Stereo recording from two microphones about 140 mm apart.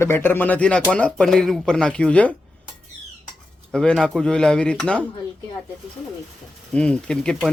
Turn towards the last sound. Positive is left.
turn(degrees=5)  # may be behind; listen again after turning